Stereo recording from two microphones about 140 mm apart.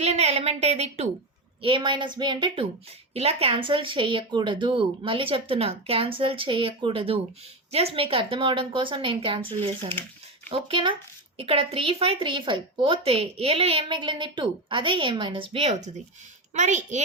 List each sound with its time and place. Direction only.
0.0 s a woman's voice: 50° right (ahead or behind)
1.6 s a woman's voice: 35° right (ahead or behind)
16.6 s a child's voice: 60° right (ahead or behind)